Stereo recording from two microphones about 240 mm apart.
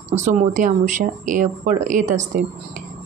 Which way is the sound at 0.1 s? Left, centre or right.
Right.